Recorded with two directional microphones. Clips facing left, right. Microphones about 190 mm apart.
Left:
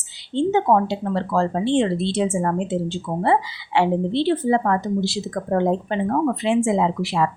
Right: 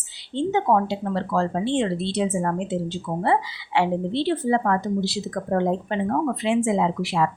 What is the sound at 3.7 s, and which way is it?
Speech, 25° left (ahead or behind).